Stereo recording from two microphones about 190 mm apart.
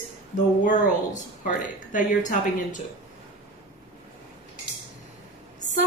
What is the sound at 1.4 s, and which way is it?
Speech, 40° left (ahead or behind).